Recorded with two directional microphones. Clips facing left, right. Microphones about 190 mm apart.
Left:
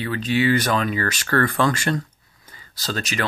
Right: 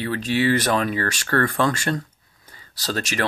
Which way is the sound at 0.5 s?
40° right (ahead or behind).